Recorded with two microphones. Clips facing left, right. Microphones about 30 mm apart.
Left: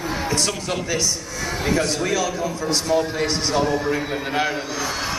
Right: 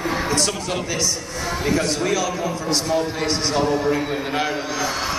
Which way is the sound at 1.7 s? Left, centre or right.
Centre.